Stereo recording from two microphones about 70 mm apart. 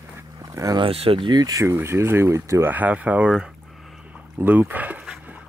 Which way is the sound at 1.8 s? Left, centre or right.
Right.